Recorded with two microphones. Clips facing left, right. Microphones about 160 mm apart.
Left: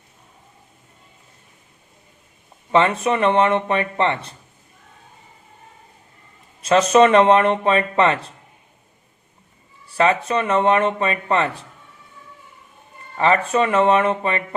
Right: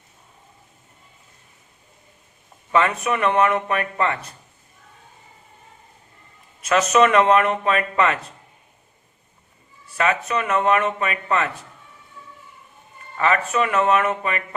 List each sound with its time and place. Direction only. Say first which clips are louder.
2.7 s speech: left 3 dB; 30° left (ahead or behind)
6.6 s speech: left 3 dB; 30° left (ahead or behind)
9.9 s speech: left 4 dB; 30° left (ahead or behind)
13.1 s speech: left 3 dB; 30° left (ahead or behind)